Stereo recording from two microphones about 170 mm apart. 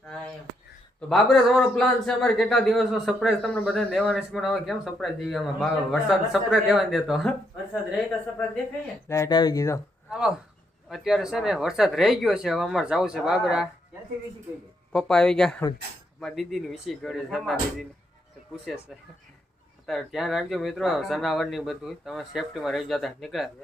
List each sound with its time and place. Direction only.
1.1 s speech: 5° left (ahead or behind)
9.0 s speech: 15° left (ahead or behind)
10.1 s speech: 5° right (ahead or behind)
14.9 s speech: 5° left (ahead or behind)
19.9 s speech: centre (ahead or behind)